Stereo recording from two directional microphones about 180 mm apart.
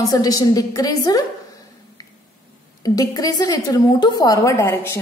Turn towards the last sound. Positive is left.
turn(degrees=15)  # may be behind; listen again after turning